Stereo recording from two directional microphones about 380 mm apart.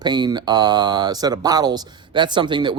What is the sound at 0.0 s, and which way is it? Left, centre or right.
A man's voice, centre.